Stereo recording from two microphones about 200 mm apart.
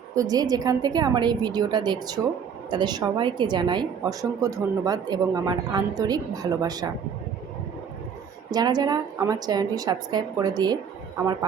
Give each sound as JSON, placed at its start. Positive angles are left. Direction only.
{"t": 0.1, "sound": "a woman's voice", "side_deg": -15}
{"t": 8.4, "sound": "a woman's voice", "side_deg": -20}